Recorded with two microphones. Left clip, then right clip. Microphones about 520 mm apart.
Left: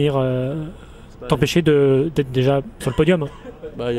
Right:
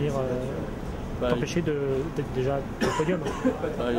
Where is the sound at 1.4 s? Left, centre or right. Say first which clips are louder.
Left 12 dB; left.